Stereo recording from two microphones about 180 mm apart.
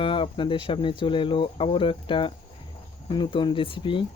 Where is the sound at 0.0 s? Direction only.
30° left (ahead or behind).